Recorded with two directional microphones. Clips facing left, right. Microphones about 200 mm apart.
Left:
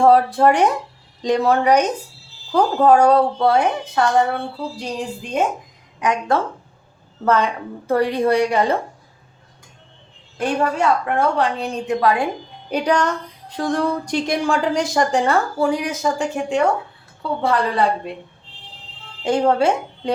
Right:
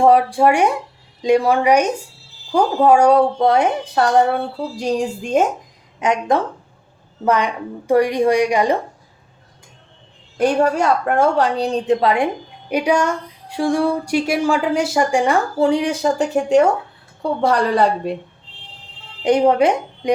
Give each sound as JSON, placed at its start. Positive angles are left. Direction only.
{"t": 0.0, "sound": "speech", "side_deg": -15}
{"t": 5.2, "sound": "speech", "side_deg": -45}
{"t": 6.0, "sound": "a woman's voice", "side_deg": -20}
{"t": 10.4, "sound": "a woman's voice", "side_deg": -40}
{"t": 12.7, "sound": "speech", "side_deg": -10}
{"t": 15.5, "sound": "a woman's voice", "side_deg": -25}
{"t": 19.2, "sound": "speech", "side_deg": -15}